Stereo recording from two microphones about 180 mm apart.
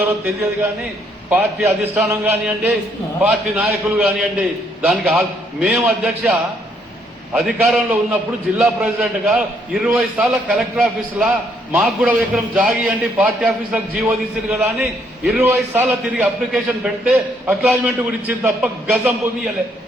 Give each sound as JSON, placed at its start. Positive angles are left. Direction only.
{"t": 1.3, "sound": "a man's voice", "side_deg": -5}
{"t": 7.3, "sound": "a man's voice", "side_deg": -5}